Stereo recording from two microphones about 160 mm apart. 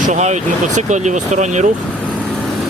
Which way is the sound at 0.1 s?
45° right (ahead or behind).